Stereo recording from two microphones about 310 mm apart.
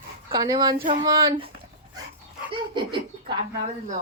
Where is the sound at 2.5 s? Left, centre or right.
Centre.